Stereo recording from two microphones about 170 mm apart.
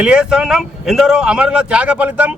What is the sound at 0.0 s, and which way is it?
Speech, 5° right (ahead or behind).